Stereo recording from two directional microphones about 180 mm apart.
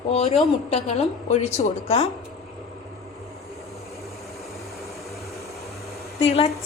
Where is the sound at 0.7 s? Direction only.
40° left (ahead or behind).